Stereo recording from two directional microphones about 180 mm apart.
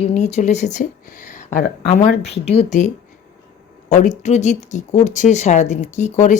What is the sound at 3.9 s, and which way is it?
Speech, 40° left (ahead or behind).